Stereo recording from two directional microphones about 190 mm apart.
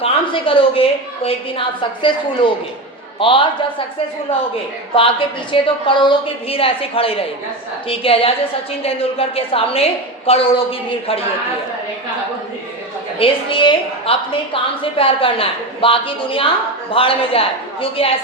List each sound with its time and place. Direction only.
0.0 s a woman's voice: 30° left (ahead or behind)
3.2 s a woman's voice: 25° left (ahead or behind)
4.9 s a woman's voice: 30° left (ahead or behind)
13.1 s a woman's voice: 30° left (ahead or behind)